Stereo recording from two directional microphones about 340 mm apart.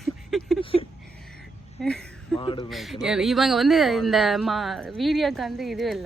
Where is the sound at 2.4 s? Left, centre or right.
Centre.